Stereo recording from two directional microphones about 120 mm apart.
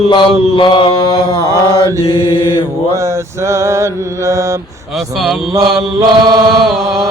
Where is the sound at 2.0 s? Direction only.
45° left (ahead or behind).